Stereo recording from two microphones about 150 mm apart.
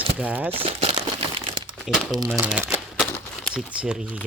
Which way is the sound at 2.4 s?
10° right (ahead or behind).